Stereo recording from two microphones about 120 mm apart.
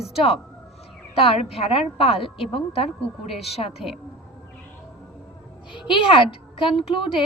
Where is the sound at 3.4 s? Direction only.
55° left (ahead or behind).